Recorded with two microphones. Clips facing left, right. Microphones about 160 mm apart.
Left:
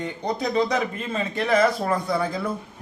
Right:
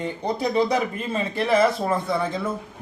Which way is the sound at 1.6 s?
Centre (ahead or behind).